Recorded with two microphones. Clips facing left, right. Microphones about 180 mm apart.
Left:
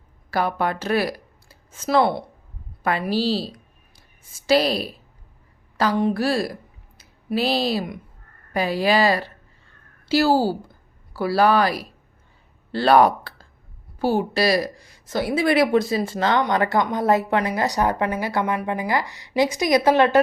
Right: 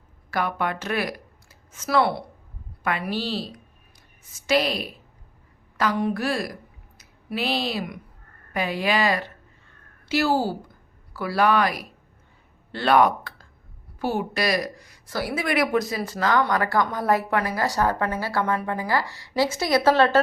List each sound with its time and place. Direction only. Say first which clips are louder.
0.3 s a woman's voice: left 3 dB; 30° left (ahead or behind); by 20.1 s 15° left (ahead or behind)